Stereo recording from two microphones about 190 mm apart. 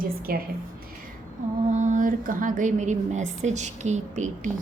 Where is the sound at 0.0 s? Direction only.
50° right (ahead or behind).